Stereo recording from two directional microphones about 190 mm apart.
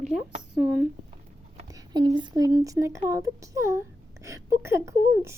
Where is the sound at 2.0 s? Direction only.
25° right (ahead or behind).